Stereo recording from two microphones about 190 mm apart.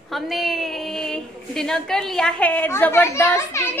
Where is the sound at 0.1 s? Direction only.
Centre (ahead or behind).